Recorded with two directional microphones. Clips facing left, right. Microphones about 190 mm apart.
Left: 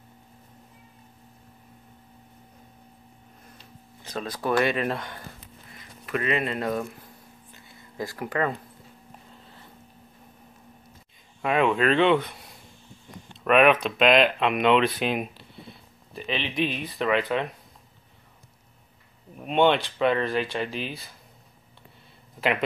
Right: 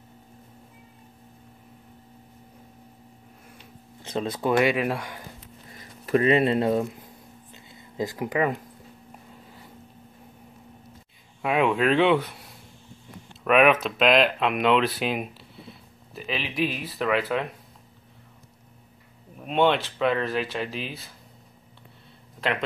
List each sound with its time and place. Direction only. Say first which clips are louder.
4.0 s speech: right 4 dB; 25° right (ahead or behind)
5.7 s speech: right 7 dB; 35° right (ahead or behind)
7.5 s a sound: right 4 dB; 20° right (ahead or behind)
11.4 s speech: even; 5° right (ahead or behind)
19.4 s speech: left 1 dB; centre (ahead or behind)